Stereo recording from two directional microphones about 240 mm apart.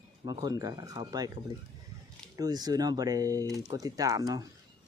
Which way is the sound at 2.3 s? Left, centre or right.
Centre.